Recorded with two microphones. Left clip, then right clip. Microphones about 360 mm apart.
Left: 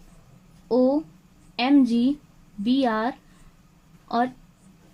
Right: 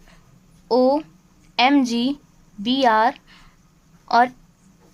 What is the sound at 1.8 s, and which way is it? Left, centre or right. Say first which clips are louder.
A woman's voice: even; centre.